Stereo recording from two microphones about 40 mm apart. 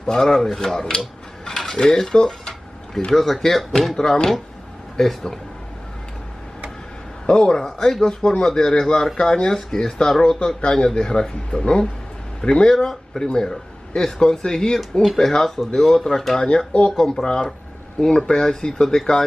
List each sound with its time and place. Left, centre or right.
0.0 s speech: centre
1.8 s a sound: centre
3.2 s a man's voice: centre
7.2 s a man's voice: centre
12.7 s a man's voice: centre
14.8 s speech: centre
15.1 s a man's voice: centre
16.3 s speech: left
16.9 s a man's voice: centre